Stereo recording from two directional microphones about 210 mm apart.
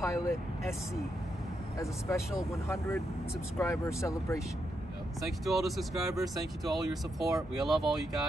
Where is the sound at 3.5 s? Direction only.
15° left (ahead or behind).